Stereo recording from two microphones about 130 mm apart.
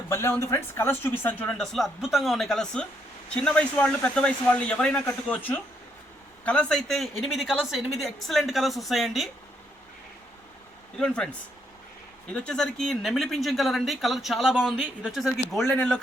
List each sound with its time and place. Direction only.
0.1 s speech: 20° left (ahead or behind); by 9.3 s centre (ahead or behind)
11.0 s speech: 5° left (ahead or behind)
12.3 s speech: 5° left (ahead or behind)